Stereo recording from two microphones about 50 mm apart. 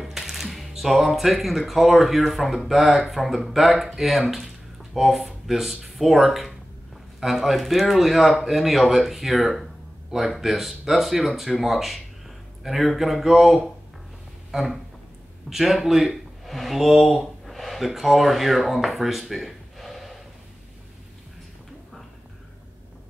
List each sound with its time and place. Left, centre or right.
0.0 s speech: centre
14.5 s a sound: centre
15.5 s speech: centre